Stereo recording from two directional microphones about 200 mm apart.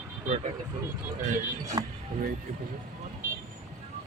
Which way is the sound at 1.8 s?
20° right (ahead or behind).